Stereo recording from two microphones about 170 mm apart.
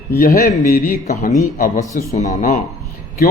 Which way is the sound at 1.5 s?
55° left (ahead or behind).